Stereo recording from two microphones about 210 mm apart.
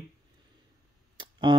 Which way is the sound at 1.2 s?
20° right (ahead or behind).